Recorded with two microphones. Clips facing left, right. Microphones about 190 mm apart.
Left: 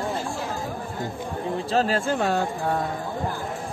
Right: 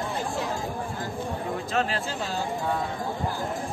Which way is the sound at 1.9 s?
55° left (ahead or behind).